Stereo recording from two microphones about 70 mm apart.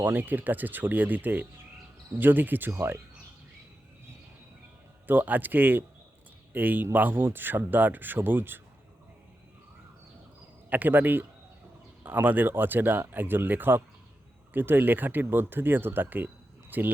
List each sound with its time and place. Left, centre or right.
0.0 s speech: right
5.0 s speech: right
10.7 s speech: right